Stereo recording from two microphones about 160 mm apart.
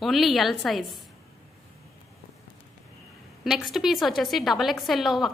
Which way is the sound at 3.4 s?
Centre (ahead or behind).